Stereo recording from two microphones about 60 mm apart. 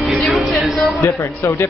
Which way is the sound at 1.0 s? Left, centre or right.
Left.